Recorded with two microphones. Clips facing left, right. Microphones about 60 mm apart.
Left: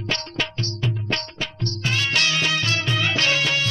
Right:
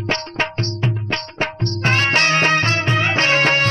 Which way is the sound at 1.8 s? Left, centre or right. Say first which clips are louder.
Right 6 dB; right.